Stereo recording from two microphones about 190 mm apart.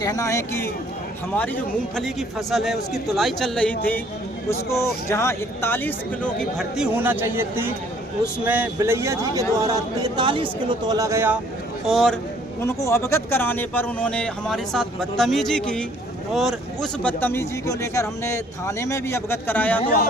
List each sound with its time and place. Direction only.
0.0 s a man's voice: 15° left (ahead or behind)
2.0 s speech: centre (ahead or behind)
4.7 s a man's voice: 15° left (ahead or behind); by 11.3 s 15° right (ahead or behind)
11.9 s speech: centre (ahead or behind)
12.6 s a man's voice: 15° left (ahead or behind)